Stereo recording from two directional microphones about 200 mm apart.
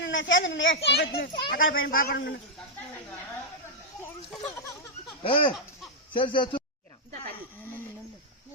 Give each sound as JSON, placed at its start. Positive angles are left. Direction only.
{"t": 0.0, "sound": "a child's voice", "side_deg": 65}
{"t": 5.2, "sound": "speech", "side_deg": 25}